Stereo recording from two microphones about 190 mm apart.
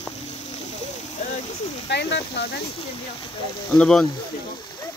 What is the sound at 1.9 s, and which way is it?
Speech, 65° left (ahead or behind).